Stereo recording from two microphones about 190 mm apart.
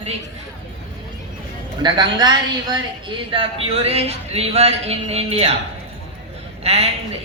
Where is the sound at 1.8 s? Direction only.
25° right (ahead or behind).